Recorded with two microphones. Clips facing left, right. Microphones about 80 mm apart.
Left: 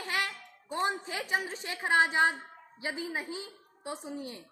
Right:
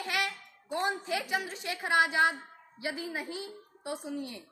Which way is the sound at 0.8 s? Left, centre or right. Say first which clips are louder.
Right 1 dB; left.